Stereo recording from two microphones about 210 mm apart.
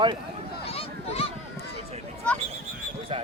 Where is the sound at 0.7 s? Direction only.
30° left (ahead or behind).